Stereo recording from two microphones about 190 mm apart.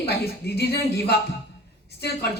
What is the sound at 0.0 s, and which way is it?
Speech, 60° left (ahead or behind).